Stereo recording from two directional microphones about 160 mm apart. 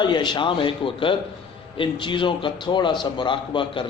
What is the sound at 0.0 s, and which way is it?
A man's voice, 30° left (ahead or behind).